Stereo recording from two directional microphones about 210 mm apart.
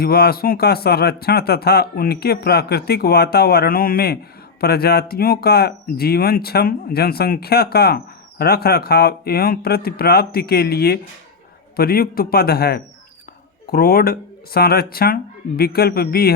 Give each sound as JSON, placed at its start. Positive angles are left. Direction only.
{"t": 0.0, "sound": "speech", "side_deg": 50}